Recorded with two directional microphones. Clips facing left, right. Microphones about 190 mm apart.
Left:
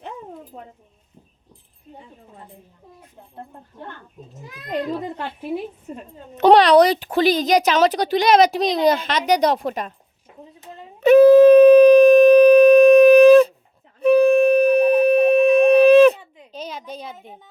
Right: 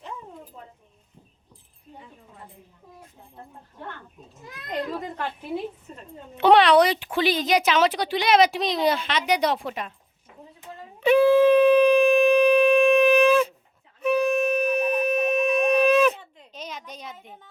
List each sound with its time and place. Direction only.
0.5 s speech: 55° left (ahead or behind)
6.3 s speech: 40° left (ahead or behind)
11.0 s shofar: 45° left (ahead or behind)
14.0 s wind instrument: 35° left (ahead or behind)
16.5 s a sound: 30° left (ahead or behind)